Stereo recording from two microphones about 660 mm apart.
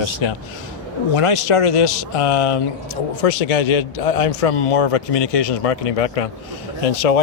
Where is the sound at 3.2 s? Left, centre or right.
Left.